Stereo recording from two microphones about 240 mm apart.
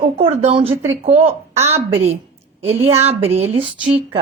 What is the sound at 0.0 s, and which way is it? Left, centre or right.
Speech, right.